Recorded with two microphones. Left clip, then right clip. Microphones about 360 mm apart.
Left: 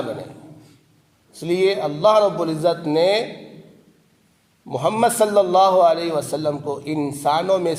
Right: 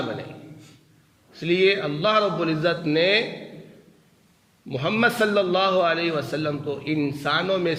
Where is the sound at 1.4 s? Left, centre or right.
Centre.